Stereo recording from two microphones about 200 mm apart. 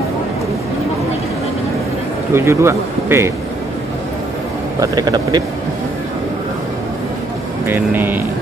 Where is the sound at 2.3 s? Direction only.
15° right (ahead or behind).